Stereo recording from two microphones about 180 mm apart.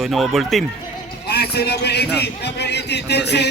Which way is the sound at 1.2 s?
65° left (ahead or behind).